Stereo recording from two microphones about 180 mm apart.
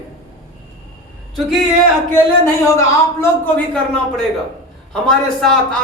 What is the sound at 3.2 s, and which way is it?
A man's voice, 5° left (ahead or behind).